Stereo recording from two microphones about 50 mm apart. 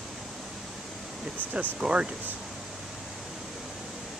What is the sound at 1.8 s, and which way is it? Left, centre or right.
Speech, centre.